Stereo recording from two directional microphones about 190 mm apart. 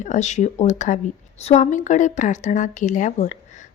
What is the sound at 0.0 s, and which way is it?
A woman's voice, 40° left (ahead or behind).